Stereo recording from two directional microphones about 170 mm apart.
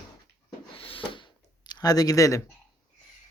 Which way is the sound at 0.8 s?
30° left (ahead or behind).